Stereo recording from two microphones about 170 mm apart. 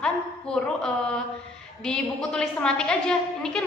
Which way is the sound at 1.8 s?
5° left (ahead or behind).